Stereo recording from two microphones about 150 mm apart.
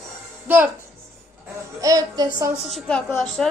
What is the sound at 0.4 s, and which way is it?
Speech, 15° right (ahead or behind).